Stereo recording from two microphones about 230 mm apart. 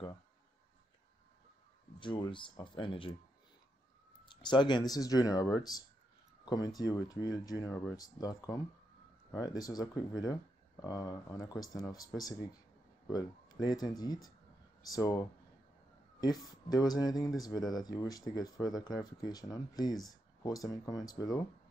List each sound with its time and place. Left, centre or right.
2.0 s speech: left
4.3 s speech: centre